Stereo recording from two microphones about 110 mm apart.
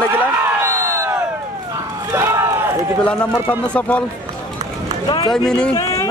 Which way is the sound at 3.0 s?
10° left (ahead or behind).